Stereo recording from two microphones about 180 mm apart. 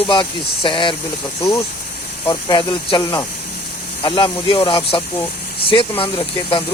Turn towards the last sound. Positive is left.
turn(degrees=30)  # may be behind; listen again after turning